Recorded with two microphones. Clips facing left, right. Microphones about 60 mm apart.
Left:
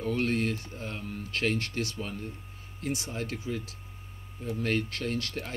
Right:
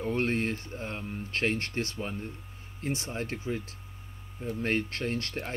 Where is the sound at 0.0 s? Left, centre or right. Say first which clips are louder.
Even; right.